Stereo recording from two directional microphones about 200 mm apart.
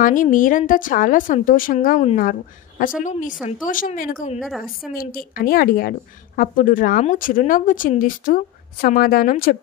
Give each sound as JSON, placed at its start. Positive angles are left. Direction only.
{"t": 0.0, "sound": "a woman's voice", "side_deg": 40}
{"t": 4.4, "sound": "a woman's voice", "side_deg": 0}
{"t": 4.9, "sound": "a woman's voice", "side_deg": 45}